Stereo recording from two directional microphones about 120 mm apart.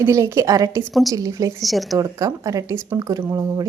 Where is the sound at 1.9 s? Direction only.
30° right (ahead or behind).